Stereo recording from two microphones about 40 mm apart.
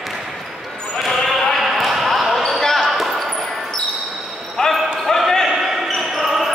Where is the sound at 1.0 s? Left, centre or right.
Centre.